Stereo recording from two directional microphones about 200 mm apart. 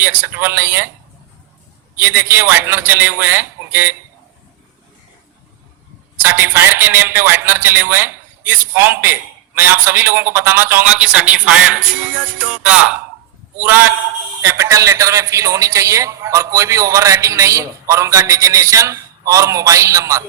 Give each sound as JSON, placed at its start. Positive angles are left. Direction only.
{"t": 0.0, "sound": "a man's voice", "side_deg": -10}
{"t": 2.0, "sound": "a man's voice", "side_deg": -10}
{"t": 6.2, "sound": "a man's voice", "side_deg": -10}